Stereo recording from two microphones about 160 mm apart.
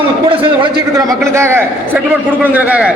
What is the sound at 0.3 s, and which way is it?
Speech, 35° right (ahead or behind).